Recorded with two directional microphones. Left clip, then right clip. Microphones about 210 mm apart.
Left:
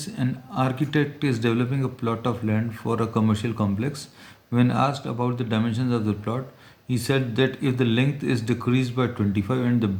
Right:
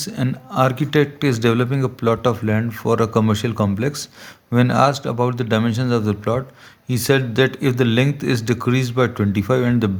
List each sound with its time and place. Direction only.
0.0 s speech: 50° right (ahead or behind)